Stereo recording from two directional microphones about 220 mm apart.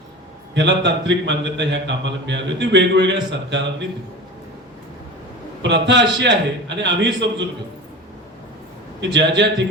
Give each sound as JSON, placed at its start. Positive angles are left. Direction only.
{"t": 0.5, "sound": "a man's voice", "side_deg": -50}
{"t": 5.6, "sound": "a man's voice", "side_deg": -50}
{"t": 9.0, "sound": "a man's voice", "side_deg": -55}